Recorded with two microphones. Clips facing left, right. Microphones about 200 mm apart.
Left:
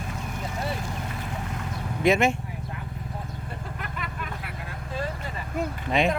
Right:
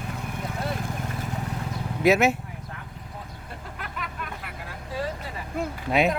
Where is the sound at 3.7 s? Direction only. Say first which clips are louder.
Right 3 dB; centre (ahead or behind).